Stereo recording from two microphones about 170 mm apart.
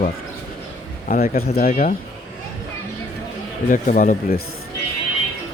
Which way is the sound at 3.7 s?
50° left (ahead or behind).